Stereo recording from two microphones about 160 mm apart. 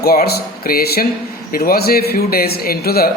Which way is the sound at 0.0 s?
75° left (ahead or behind).